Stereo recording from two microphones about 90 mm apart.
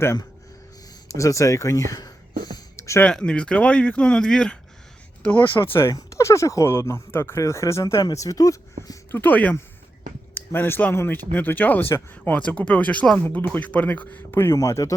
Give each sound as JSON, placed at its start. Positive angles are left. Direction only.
{"t": 1.0, "sound": "speech", "side_deg": 35}
{"t": 2.7, "sound": "music", "side_deg": 30}
{"t": 3.1, "sound": "speech", "side_deg": 10}
{"t": 5.9, "sound": "speech", "side_deg": 35}
{"t": 9.1, "sound": "speech", "side_deg": 15}
{"t": 12.4, "sound": "speech", "side_deg": 15}
{"t": 14.5, "sound": "speech", "side_deg": 35}